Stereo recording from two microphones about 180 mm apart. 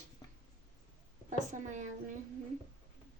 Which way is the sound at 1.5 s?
45° right (ahead or behind).